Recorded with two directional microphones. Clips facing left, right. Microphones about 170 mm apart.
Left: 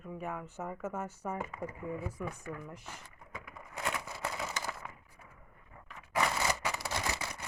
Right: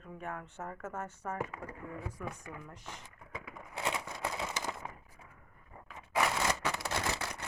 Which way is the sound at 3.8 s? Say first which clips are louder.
Right 1 dB; 25° right (ahead or behind).